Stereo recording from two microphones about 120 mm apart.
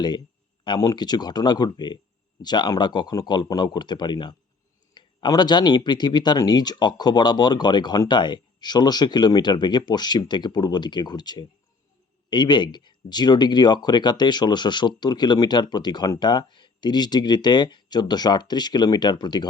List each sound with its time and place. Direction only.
0.6 s speech: 35° left (ahead or behind)